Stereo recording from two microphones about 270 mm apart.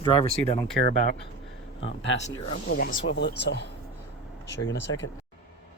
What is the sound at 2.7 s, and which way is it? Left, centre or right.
Speech, left.